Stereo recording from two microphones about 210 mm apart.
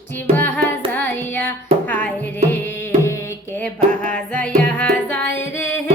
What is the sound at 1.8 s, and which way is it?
Music, 5° left (ahead or behind).